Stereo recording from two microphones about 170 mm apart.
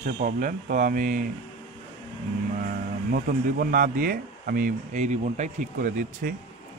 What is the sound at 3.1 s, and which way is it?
A man's voice, 60° right (ahead or behind).